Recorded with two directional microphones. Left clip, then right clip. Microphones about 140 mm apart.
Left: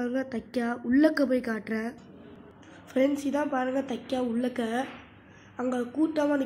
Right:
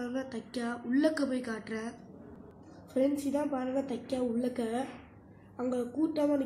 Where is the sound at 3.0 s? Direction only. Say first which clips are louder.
Left 4 dB; 20° left (ahead or behind).